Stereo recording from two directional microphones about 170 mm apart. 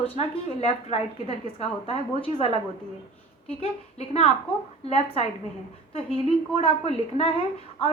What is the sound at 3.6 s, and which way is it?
A woman's voice, 35° left (ahead or behind).